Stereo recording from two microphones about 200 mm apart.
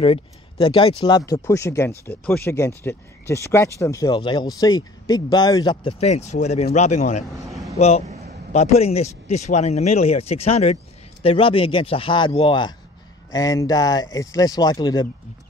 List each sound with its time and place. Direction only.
0.0 s speech: 25° left (ahead or behind)